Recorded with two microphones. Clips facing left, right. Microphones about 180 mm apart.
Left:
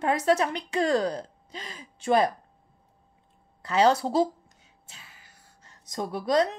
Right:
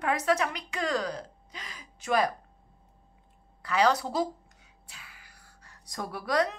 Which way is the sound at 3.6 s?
25° left (ahead or behind).